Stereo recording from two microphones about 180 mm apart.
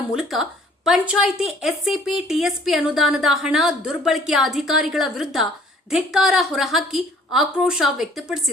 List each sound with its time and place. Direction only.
0.1 s a woman's voice: centre (ahead or behind)